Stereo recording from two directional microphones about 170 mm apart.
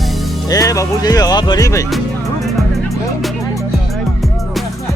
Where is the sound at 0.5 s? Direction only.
20° left (ahead or behind).